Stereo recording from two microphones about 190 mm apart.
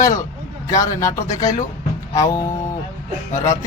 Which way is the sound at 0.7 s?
15° left (ahead or behind).